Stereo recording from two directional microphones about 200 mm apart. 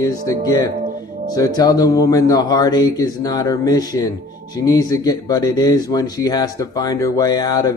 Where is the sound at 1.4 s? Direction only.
20° left (ahead or behind).